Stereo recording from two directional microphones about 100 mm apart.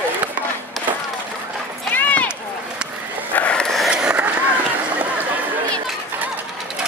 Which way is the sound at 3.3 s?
10° left (ahead or behind).